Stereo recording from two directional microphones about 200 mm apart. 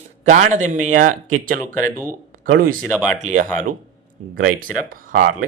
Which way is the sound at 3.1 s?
40° right (ahead or behind).